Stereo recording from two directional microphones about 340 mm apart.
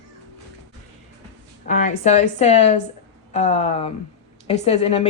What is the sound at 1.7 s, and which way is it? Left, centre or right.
A woman's voice, left.